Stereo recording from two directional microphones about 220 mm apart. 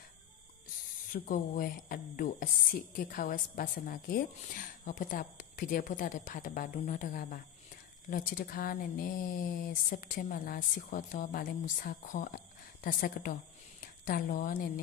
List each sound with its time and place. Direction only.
1.1 s a woman's voice: 40° left (ahead or behind)